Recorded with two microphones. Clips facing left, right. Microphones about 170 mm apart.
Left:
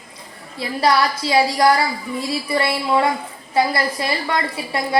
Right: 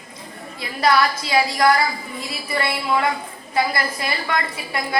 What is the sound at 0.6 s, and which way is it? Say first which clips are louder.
A woman's voice: left 1 dB; 30° left (ahead or behind).